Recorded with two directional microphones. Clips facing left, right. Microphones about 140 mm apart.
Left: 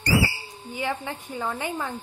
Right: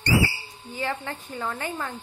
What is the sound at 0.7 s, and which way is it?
A woman's voice, 15° left (ahead or behind).